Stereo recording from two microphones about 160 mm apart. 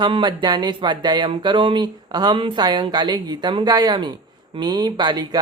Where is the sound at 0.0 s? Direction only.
30° right (ahead or behind).